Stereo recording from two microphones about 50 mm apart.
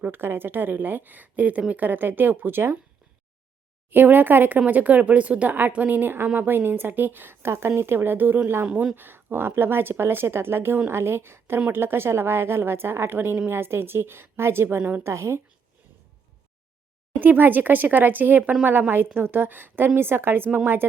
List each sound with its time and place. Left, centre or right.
0.0 s speech: right
3.8 s speech: right
8.6 s speech: right
9.0 s speech: right
15.0 s speech: right
17.2 s speech: right